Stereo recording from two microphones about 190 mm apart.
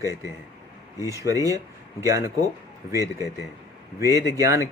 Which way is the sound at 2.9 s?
15° right (ahead or behind).